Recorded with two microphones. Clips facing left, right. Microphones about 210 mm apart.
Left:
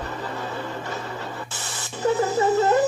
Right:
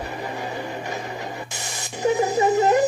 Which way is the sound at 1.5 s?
15° right (ahead or behind).